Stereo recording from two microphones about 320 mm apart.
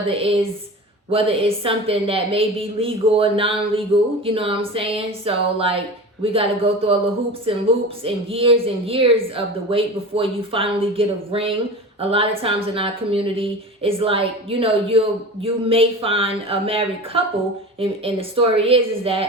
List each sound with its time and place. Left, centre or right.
0.1 s a woman's voice: centre